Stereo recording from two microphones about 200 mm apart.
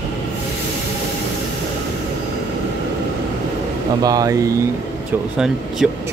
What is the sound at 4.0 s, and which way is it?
Speech, 20° right (ahead or behind).